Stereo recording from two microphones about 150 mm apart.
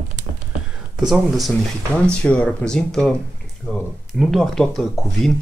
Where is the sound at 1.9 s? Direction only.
10° left (ahead or behind).